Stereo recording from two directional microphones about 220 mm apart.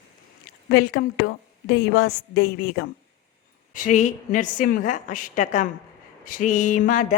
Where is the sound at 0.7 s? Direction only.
45° left (ahead or behind).